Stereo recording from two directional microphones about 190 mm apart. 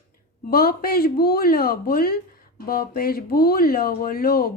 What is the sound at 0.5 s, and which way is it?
A woman's voice, 50° left (ahead or behind).